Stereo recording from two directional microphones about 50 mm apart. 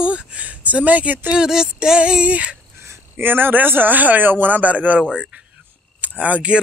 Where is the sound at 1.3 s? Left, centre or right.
Centre.